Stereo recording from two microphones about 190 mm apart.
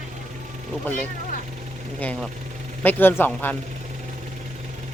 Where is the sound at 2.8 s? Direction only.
10° left (ahead or behind).